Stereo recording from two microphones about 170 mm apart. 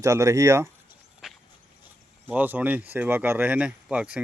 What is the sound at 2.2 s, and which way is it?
Speech, 10° right (ahead or behind).